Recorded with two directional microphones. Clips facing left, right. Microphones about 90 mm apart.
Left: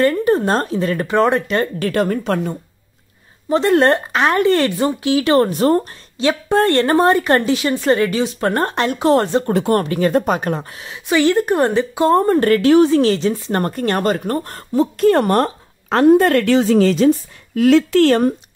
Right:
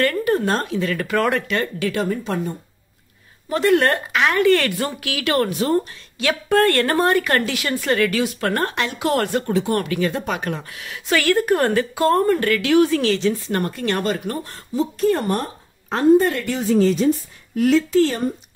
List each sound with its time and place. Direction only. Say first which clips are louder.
0.0 s speech: left 4 dB; 25° left (ahead or behind)
1.9 s speech: left 6 dB; 55° left (ahead or behind)
3.4 s speech: left 4 dB; 25° left (ahead or behind)
5.5 s speech: left 5 dB; 40° left (ahead or behind)
6.1 s speech: left 2 dB; 25° left (ahead or behind)
9.5 s speech: left 4 dB; 55° left (ahead or behind)
9.8 s speech: left 6 dB; 35° left (ahead or behind)
11.1 s speech: left 3 dB; 20° left (ahead or behind)
12.4 s speech: left 5 dB; 35° left (ahead or behind); by 17.1 s 85° left
17.6 s speech: left 5 dB; 75° left (ahead or behind)